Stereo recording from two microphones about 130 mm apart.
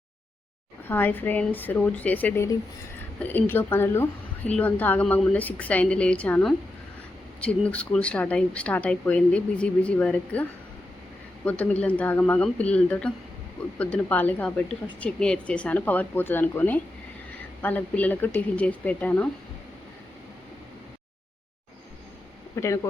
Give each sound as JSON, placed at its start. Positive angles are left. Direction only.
{"t": 0.9, "sound": "speech", "side_deg": 15}
{"t": 11.4, "sound": "speech", "side_deg": 10}
{"t": 22.5, "sound": "speech", "side_deg": 25}